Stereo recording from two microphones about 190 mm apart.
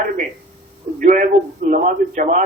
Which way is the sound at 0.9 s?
45° right (ahead or behind).